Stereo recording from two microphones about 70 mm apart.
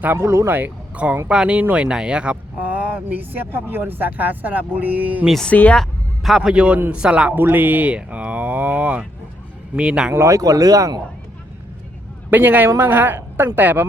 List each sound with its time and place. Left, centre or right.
0.0 s a woman's voice: right
0.9 s a man's voice: centre
1.5 s speech: right
5.5 s speech: left
5.7 s a sound: centre
6.5 s a man's voice: centre
7.3 s a man's voice: right; by 10.1 s centre
10.2 s speech: right
12.3 s a woman's voice: right